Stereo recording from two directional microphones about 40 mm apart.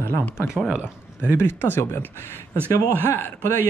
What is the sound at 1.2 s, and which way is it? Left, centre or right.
Speech, left.